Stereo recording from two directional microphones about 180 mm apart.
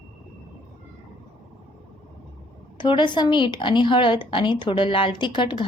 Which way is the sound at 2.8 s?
25° left (ahead or behind).